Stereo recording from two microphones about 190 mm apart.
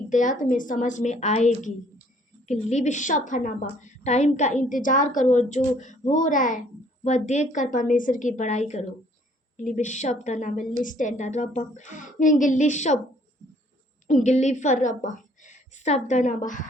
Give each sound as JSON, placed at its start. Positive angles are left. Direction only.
{"t": 0.1, "sound": "a woman's voice", "side_deg": 40}
{"t": 14.1, "sound": "a woman's voice", "side_deg": 40}